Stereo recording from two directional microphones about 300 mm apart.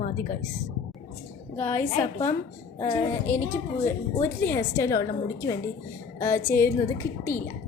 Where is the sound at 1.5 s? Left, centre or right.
Centre.